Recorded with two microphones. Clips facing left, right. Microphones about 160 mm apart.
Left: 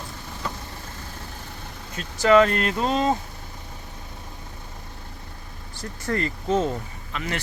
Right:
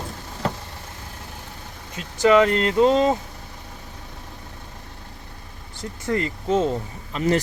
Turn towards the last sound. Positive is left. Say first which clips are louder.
# right 9 dB
turn(degrees=-35)  # may be behind; listen again after turning